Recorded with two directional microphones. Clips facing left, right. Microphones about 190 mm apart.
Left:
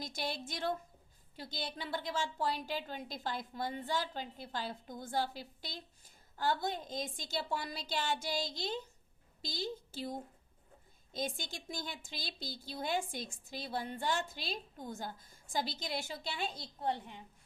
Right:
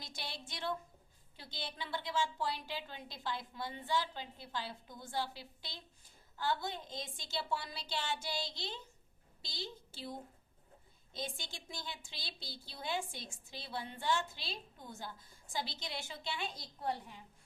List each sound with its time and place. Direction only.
0.0 s a woman's voice: 45° left (ahead or behind)
16.8 s a woman's voice: 20° left (ahead or behind)